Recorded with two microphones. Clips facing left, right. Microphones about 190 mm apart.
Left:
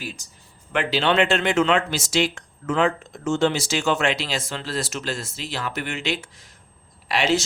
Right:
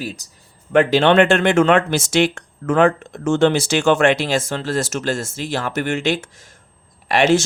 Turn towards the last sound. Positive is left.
turn(degrees=-50)  # may be behind; listen again after turning